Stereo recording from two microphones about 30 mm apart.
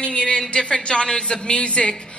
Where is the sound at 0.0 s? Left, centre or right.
Left.